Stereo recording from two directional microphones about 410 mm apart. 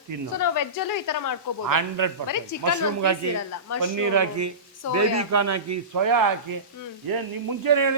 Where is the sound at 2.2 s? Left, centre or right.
Left.